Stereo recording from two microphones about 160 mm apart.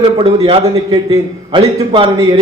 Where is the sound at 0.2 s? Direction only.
40° right (ahead or behind).